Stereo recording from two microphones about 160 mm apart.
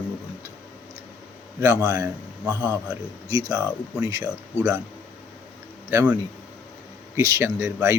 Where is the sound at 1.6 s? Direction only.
20° right (ahead or behind).